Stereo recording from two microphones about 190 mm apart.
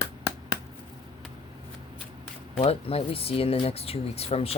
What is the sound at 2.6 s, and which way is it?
Speech, 30° left (ahead or behind).